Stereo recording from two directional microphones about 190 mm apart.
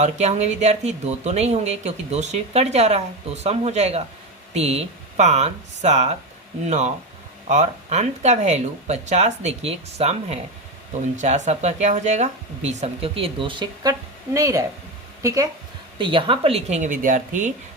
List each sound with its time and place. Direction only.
0.0 s speech: 35° right (ahead or behind); by 14.6 s 15° right (ahead or behind)
16.0 s speech: 25° right (ahead or behind); by 17.5 s 40° right (ahead or behind)